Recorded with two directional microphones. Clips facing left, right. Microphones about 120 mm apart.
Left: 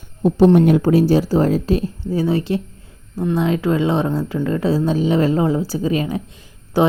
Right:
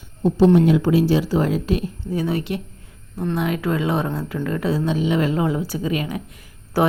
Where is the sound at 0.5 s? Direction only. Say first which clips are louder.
Left 3 dB; 50° left (ahead or behind).